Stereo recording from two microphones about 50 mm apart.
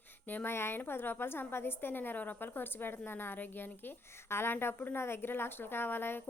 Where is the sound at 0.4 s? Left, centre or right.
Left.